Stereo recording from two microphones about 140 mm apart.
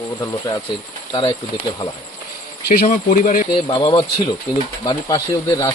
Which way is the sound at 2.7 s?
90° left.